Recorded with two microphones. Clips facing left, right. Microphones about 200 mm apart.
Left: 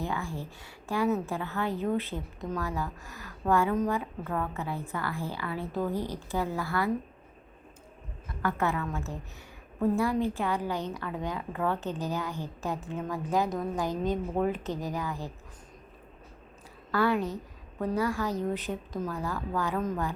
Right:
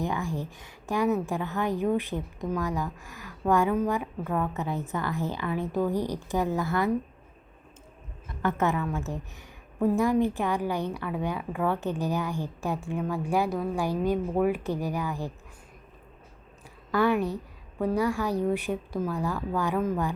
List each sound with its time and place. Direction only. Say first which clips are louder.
0.0 s a woman's voice: right 4 dB; 15° right (ahead or behind)
8.4 s a woman's voice: right 3 dB; 20° right (ahead or behind)
16.9 s a woman's voice: right 3 dB; 15° right (ahead or behind)